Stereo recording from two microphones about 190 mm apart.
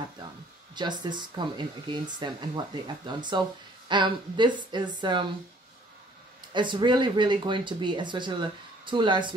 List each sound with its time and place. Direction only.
0.7 s speech: 25° right (ahead or behind)
6.5 s speech: 25° right (ahead or behind)